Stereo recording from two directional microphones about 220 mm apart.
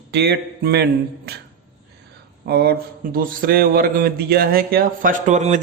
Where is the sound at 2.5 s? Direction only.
45° right (ahead or behind).